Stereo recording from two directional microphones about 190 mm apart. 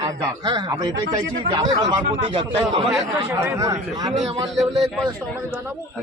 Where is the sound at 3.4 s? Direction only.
15° right (ahead or behind).